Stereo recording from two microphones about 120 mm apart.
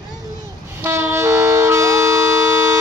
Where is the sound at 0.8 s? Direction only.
20° right (ahead or behind).